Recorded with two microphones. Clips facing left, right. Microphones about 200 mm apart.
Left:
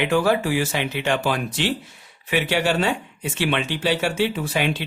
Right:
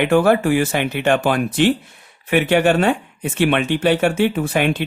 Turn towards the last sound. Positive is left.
turn(degrees=-55)  # may be behind; listen again after turning